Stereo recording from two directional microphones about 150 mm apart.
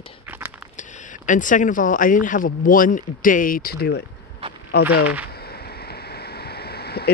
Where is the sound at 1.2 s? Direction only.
60° left (ahead or behind).